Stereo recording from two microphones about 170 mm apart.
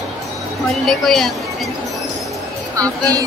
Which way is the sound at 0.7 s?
Centre (ahead or behind).